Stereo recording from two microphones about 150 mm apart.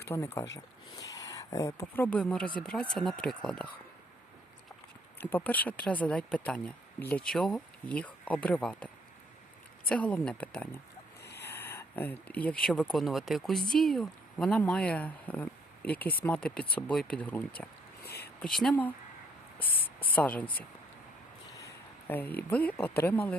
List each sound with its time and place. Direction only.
0.1 s speech: 15° left (ahead or behind)
5.1 s speech: 10° left (ahead or behind)
9.9 s speech: 5° left (ahead or behind)
11.2 s a sound: 90° left
11.4 s speech: 15° left (ahead or behind)
18.0 s a sound: 90° left
18.3 s speech: 5° left (ahead or behind)
21.5 s a sound: 15° left (ahead or behind)
22.4 s speech: 10° left (ahead or behind)